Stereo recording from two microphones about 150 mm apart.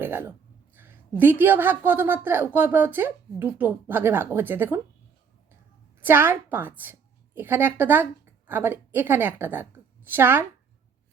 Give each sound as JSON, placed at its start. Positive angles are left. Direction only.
{"t": 0.0, "sound": "a sound", "side_deg": -15}
{"t": 0.8, "sound": "a woman's voice", "side_deg": -15}
{"t": 6.0, "sound": "a woman's voice", "side_deg": -15}